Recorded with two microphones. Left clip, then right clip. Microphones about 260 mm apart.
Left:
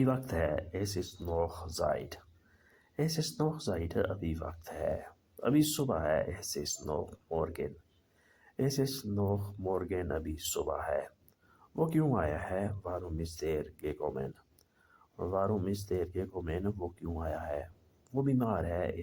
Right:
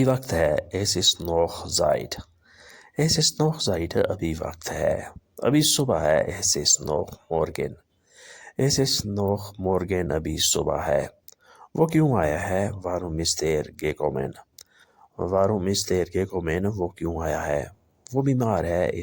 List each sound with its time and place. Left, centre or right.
0.0 s speech: right